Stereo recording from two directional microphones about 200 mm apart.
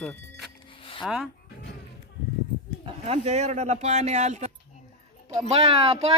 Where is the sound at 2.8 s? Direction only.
30° right (ahead or behind).